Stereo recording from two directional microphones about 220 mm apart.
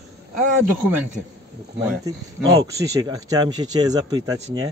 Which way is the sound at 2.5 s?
15° right (ahead or behind).